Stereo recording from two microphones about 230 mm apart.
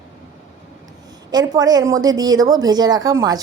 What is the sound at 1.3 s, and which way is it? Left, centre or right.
A woman's voice, centre.